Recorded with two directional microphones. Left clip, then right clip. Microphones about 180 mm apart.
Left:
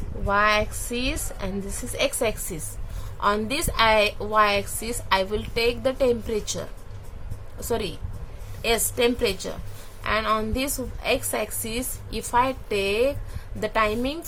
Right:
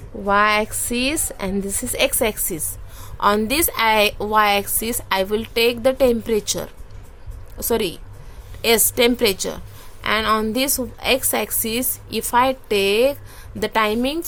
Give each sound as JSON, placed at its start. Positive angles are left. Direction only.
{"t": 0.3, "sound": "a woman's voice", "side_deg": -55}
{"t": 7.7, "sound": "a woman's voice", "side_deg": -55}